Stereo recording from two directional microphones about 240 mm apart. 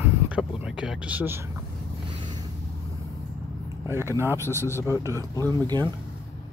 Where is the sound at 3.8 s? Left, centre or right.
Centre.